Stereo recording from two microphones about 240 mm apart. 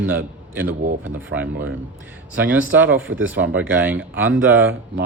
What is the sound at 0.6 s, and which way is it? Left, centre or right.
Speech, right.